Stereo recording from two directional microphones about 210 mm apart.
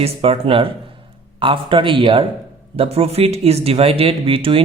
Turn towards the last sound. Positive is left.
turn(degrees=-25)  # may be behind; listen again after turning